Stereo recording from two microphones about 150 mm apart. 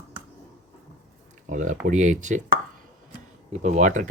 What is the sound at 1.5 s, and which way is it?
Speech, 55° right (ahead or behind).